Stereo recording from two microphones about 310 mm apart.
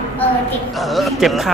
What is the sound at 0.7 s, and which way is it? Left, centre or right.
Speech, centre.